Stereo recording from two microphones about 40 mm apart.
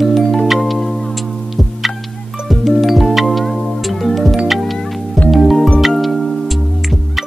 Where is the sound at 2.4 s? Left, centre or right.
Centre.